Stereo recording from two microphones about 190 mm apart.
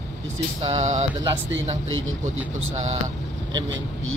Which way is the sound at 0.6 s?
35° right (ahead or behind).